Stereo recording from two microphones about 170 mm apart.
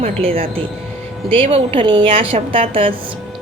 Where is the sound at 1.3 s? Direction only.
35° right (ahead or behind).